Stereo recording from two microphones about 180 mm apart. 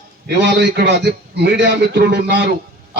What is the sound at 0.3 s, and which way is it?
A man's voice, 70° right (ahead or behind).